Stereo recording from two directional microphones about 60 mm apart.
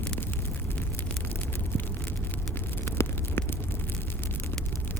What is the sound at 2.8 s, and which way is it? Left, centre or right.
Vehicle, left.